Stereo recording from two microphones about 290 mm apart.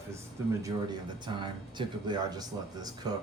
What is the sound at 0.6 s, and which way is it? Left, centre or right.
Speech, centre.